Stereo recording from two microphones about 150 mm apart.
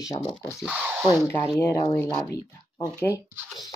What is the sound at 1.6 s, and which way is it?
Speech, 20° left (ahead or behind).